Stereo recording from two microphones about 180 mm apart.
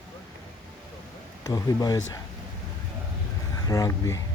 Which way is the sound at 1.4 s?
20° left (ahead or behind).